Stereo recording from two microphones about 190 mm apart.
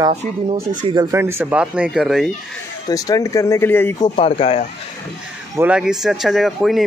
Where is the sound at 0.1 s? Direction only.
35° right (ahead or behind).